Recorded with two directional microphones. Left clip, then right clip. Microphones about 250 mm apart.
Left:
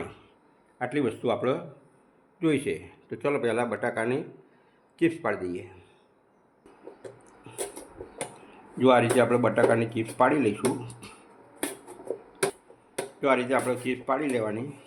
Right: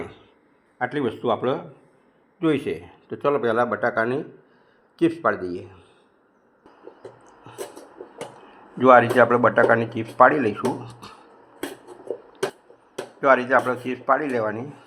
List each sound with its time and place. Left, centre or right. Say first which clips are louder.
0.8 s a man's voice: right 3 dB; centre
7.3 s a sound: right 3 dB; centre
8.8 s a man's voice: right 7 dB; centre
13.2 s a man's voice: right 7 dB; centre